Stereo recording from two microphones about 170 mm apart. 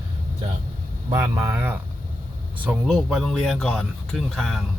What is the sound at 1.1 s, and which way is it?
Speech, 15° right (ahead or behind).